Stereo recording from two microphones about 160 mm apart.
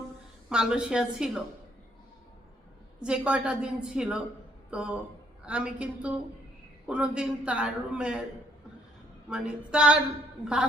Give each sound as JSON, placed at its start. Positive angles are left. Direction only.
{"t": 0.5, "sound": "a woman's voice", "side_deg": -5}
{"t": 3.0, "sound": "a woman's voice", "side_deg": -5}
{"t": 9.3, "sound": "a man's voice", "side_deg": -5}